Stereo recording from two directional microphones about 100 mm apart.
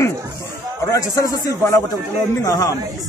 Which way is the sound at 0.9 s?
35° left (ahead or behind).